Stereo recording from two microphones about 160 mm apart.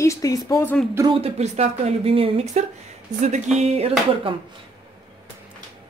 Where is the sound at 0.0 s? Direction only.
20° left (ahead or behind).